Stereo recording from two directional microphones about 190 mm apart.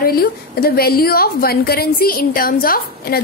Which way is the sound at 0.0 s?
55° left (ahead or behind).